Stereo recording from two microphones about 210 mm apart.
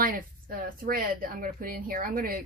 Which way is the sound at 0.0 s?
45° right (ahead or behind).